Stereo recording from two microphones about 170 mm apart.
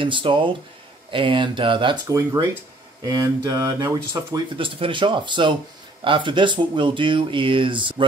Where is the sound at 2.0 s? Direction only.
20° right (ahead or behind).